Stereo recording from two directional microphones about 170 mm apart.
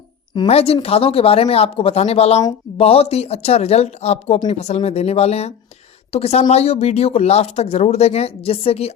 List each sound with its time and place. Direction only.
0.3 s speech: 35° left (ahead or behind)